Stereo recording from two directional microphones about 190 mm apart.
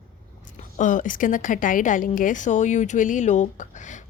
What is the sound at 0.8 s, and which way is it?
A woman's voice, 40° left (ahead or behind).